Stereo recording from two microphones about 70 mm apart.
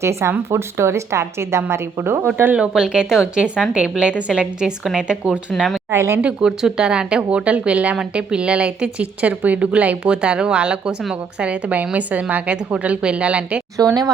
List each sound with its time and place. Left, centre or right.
0.0 s a woman's voice: right
2.6 s a woman's voice: centre
5.5 s speech: centre
5.9 s a woman's voice: right
6.2 s a woman's voice: centre
13.7 s speech: right